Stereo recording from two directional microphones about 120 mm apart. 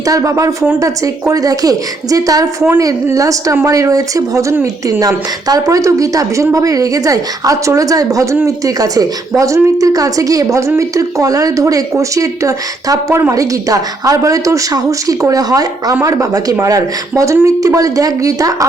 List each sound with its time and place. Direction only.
0.1 s speech: 25° right (ahead or behind)